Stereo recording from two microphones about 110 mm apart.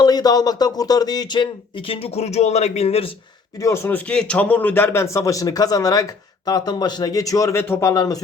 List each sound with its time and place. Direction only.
0.0 s speech: 35° left (ahead or behind)
1.9 s speech: 65° left (ahead or behind)
3.6 s speech: 25° left (ahead or behind)